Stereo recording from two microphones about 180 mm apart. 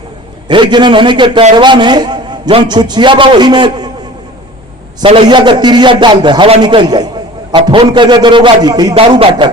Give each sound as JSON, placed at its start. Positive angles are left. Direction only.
{"t": 0.4, "sound": "a man's voice", "side_deg": -25}
{"t": 5.0, "sound": "a man's voice", "side_deg": -30}